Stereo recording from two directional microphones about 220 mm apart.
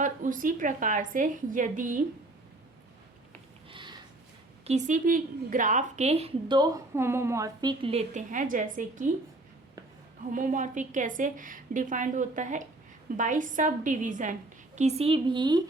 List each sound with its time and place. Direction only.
0.0 s a woman's voice: 35° right (ahead or behind)
3.7 s sniff: 20° right (ahead or behind)
4.6 s a woman's voice: 30° right (ahead or behind)
10.3 s a woman's voice: 35° right (ahead or behind); by 15.6 s 20° right (ahead or behind)